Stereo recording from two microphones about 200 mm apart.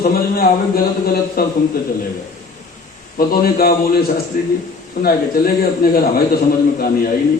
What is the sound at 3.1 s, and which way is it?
A man's voice, 45° left (ahead or behind).